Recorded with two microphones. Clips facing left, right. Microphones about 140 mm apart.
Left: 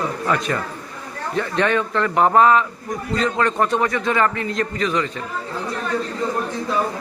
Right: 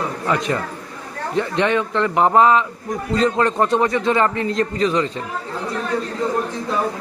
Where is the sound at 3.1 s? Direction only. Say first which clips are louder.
Right 2 dB; 30° right (ahead or behind).